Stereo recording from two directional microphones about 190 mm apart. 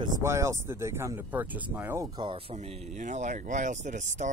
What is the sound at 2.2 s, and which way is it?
Speech, 30° right (ahead or behind).